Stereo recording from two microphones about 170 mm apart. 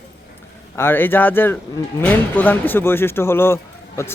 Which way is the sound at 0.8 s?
10° left (ahead or behind).